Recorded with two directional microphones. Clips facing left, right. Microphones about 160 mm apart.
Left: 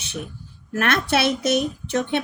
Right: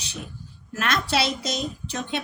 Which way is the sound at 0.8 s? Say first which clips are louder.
Left 4 dB; 55° left (ahead or behind).